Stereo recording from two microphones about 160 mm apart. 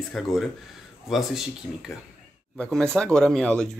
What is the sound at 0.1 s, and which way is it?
Speech, centre (ahead or behind).